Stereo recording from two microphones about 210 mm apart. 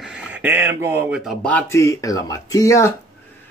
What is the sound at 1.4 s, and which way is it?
Speech, 10° left (ahead or behind).